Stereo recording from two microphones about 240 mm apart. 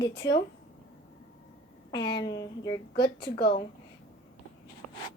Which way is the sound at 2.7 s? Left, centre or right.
Left.